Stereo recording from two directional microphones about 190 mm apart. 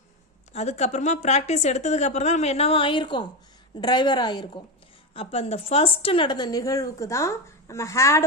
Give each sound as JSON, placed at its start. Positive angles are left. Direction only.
{"t": 0.5, "sound": "a woman's voice", "side_deg": 35}